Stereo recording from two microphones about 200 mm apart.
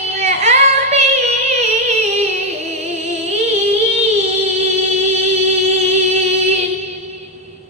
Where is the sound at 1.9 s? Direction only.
35° right (ahead or behind).